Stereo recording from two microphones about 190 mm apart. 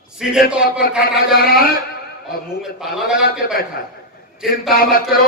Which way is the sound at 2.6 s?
Centre (ahead or behind).